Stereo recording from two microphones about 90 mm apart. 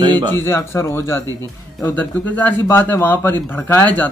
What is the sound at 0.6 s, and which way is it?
Speech, 30° left (ahead or behind).